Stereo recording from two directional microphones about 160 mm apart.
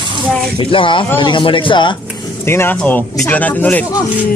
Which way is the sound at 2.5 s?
15° left (ahead or behind).